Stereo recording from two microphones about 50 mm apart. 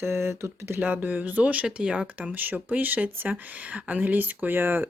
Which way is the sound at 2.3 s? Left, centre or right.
Right.